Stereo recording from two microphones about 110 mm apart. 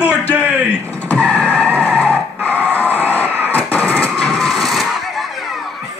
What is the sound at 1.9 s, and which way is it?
Skidding, 15° left (ahead or behind).